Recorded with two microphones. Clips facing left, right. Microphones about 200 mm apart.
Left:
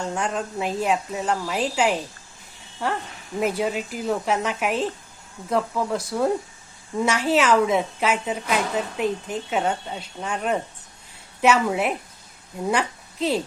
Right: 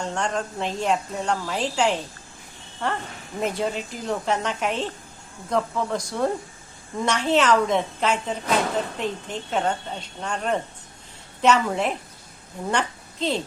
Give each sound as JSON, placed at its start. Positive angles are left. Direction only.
{"t": 0.0, "sound": "a woman's voice", "side_deg": 5}